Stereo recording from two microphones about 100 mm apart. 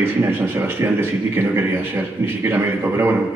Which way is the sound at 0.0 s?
20° right (ahead or behind).